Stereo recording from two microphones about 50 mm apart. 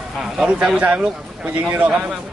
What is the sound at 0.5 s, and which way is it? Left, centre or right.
Speech, right.